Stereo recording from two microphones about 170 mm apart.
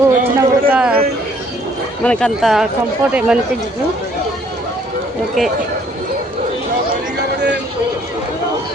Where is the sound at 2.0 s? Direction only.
Centre (ahead or behind).